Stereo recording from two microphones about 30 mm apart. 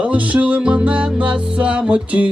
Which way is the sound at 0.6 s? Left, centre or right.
Right.